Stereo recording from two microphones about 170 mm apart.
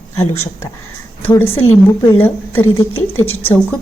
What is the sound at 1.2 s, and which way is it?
A woman's voice, 15° left (ahead or behind).